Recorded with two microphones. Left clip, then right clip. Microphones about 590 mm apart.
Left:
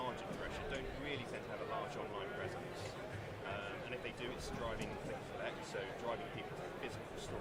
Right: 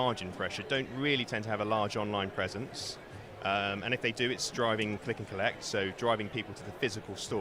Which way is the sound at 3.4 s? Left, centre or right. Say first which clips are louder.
Right 15 dB; right.